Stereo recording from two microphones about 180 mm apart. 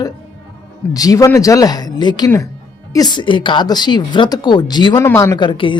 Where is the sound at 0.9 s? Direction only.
20° left (ahead or behind).